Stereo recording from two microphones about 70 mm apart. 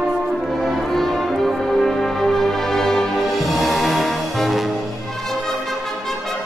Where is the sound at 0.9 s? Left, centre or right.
Centre.